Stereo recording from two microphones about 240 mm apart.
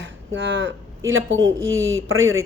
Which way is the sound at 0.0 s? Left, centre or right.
Right.